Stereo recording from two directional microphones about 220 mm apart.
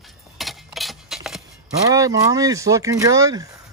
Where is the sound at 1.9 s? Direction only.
15° right (ahead or behind).